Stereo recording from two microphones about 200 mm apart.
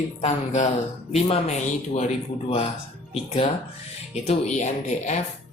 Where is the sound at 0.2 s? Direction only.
35° left (ahead or behind).